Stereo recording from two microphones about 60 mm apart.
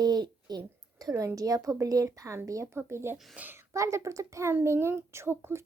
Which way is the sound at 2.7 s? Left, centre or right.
Right.